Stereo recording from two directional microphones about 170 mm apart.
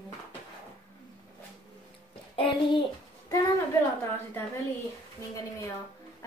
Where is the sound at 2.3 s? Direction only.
30° left (ahead or behind).